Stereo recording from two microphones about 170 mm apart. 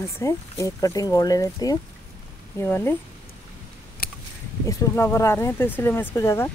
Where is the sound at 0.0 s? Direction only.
15° left (ahead or behind).